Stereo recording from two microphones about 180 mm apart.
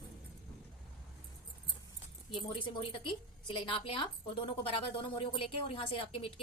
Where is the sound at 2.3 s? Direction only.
30° left (ahead or behind).